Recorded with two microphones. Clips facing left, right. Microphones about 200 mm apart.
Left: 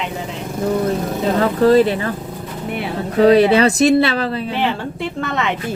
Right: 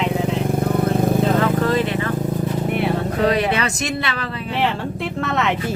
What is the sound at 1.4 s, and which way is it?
Speech, 35° left (ahead or behind).